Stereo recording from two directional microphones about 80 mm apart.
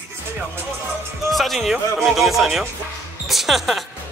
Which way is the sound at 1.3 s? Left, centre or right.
Centre.